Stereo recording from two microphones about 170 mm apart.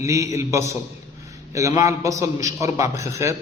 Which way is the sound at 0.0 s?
20° right (ahead or behind).